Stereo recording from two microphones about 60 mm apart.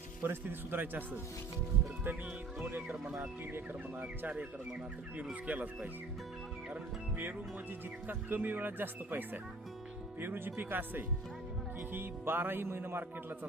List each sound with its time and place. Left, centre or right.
0.2 s a man's voice: right
3.2 s a man's voice: right
4.2 s speech: right
8.0 s a man's voice: right